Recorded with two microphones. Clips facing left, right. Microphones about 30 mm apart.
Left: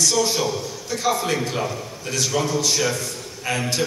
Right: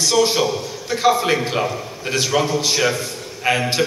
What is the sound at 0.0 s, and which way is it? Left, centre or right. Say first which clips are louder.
A man's voice: right 4 dB; right.